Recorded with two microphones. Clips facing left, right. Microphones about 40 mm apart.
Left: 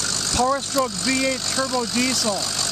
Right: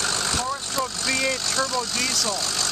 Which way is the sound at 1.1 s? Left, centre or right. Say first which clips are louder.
Left 2 dB; centre.